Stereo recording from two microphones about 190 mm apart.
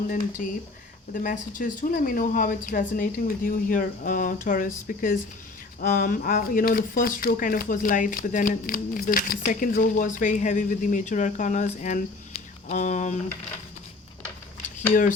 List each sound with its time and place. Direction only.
0.4 s speech: 45° left (ahead or behind)
14.8 s speech: 45° left (ahead or behind)